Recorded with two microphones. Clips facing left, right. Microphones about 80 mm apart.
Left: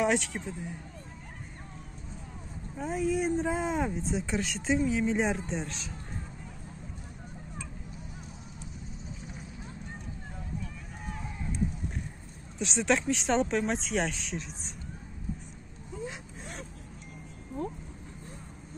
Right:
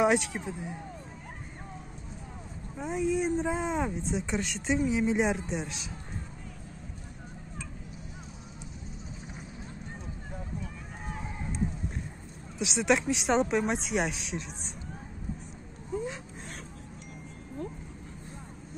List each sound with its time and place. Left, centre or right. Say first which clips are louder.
0.0 s speech: right 2 dB; centre
2.8 s speech: even; centre
12.5 s speech: right 1 dB; centre